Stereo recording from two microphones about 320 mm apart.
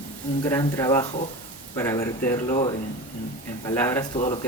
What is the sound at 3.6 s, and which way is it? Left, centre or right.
Speech, centre.